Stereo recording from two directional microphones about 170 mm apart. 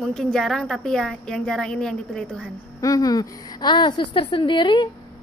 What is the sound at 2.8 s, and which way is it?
A woman's voice, 20° left (ahead or behind).